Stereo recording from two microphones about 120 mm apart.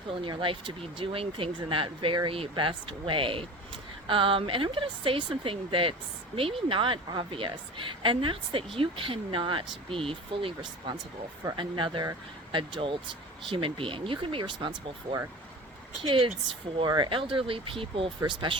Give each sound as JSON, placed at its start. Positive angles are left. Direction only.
{"t": 0.1, "sound": "a woman's voice", "side_deg": -45}